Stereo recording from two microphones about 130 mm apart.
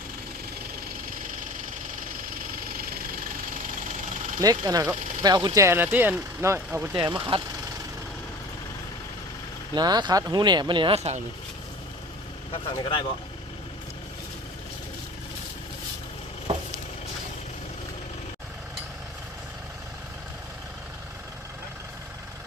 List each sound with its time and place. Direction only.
2.8 s engine: 90° right
4.4 s speech: 30° right (ahead or behind)
7.0 s speech: 35° right (ahead or behind)
9.7 s speech: 35° right (ahead or behind); by 11.2 s 55° right (ahead or behind)
12.7 s speech: 40° left (ahead or behind)